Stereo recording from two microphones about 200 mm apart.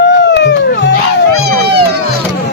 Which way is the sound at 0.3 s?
60° left (ahead or behind).